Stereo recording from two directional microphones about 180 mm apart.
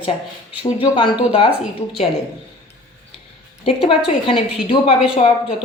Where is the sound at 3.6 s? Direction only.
30° left (ahead or behind).